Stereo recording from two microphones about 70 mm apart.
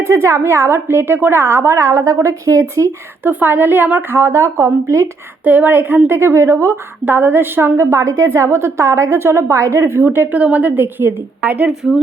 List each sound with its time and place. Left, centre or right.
0.1 s a woman's voice: right
3.2 s a woman's voice: right
5.5 s a woman's voice: right
7.0 s a woman's voice: right
7.8 s a woman's voice: right
10.3 s a woman's voice: centre
11.8 s speech: centre